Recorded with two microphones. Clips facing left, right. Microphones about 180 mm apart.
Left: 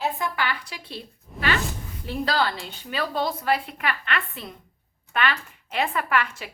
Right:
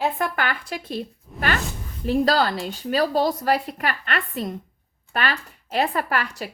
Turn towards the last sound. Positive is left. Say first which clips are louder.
# even
turn(degrees=-40)  # may be behind; listen again after turning